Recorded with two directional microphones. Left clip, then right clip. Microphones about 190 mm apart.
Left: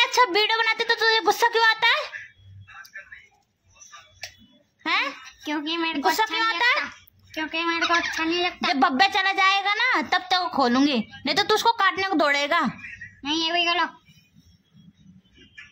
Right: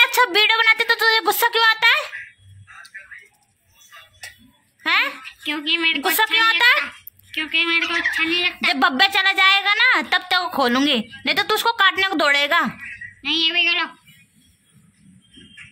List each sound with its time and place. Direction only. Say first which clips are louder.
0.0 s a woman's voice: right 4 dB; 10° left (ahead or behind)
4.8 s a child's voice: right 5 dB; 5° left (ahead or behind)
5.2 s speech: right 4 dB; 40° left (ahead or behind)
6.1 s a woman's voice: right 6 dB; 10° left (ahead or behind)
6.8 s dog: right 4 dB; 40° left (ahead or behind)
8.2 s speech: right 5 dB; 40° left (ahead or behind)
8.6 s a woman's voice: right 3 dB; 10° left (ahead or behind)
13.2 s speech: right 5 dB; 40° left (ahead or behind)